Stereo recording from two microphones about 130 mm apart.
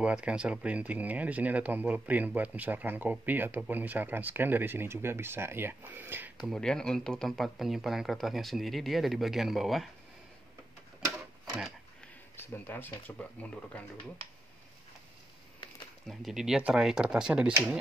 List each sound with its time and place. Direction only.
0.0 s speech: 10° right (ahead or behind)
6.3 s speech: centre (ahead or behind)
12.4 s speech: 15° left (ahead or behind)
16.1 s speech: 5° right (ahead or behind)